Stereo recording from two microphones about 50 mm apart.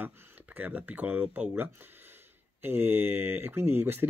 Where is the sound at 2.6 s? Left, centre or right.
Right.